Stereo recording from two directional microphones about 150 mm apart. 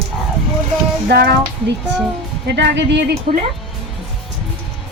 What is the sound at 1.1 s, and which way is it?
Speech, 90° right.